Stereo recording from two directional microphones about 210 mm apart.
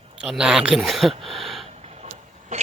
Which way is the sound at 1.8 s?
30° right (ahead or behind).